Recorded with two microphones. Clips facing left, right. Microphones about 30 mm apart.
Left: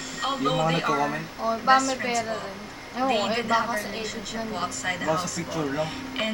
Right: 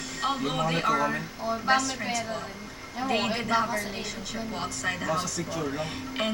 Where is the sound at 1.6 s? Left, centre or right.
Left.